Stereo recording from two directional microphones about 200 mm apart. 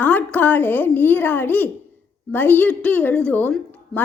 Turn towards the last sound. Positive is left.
turn(degrees=10)  # may be behind; listen again after turning